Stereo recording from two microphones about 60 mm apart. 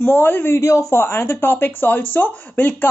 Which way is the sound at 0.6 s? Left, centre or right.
Left.